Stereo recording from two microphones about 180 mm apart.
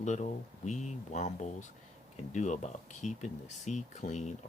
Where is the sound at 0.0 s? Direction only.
40° left (ahead or behind).